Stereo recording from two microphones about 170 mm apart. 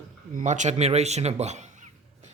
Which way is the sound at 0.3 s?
45° right (ahead or behind).